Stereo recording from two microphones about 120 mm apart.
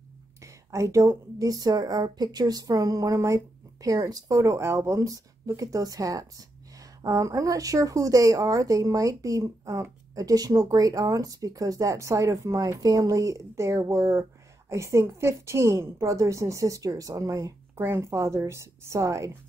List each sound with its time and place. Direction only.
0.4 s a woman's voice: 25° right (ahead or behind)